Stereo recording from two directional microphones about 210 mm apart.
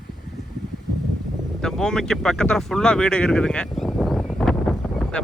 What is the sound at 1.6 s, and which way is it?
Speech, centre (ahead or behind).